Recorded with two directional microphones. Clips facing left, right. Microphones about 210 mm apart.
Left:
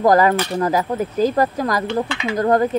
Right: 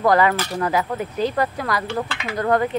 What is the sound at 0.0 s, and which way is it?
Speech, 40° left (ahead or behind).